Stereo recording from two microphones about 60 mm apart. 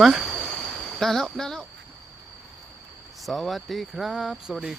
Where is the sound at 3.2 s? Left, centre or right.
Centre.